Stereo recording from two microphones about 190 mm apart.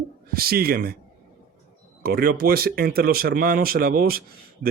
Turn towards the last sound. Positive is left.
turn(degrees=-50)  # may be behind; listen again after turning